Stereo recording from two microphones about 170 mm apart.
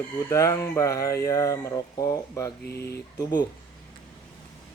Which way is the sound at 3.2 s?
25° left (ahead or behind).